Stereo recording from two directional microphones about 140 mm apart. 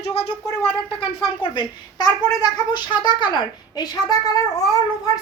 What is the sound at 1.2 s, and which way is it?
Speech, 35° left (ahead or behind).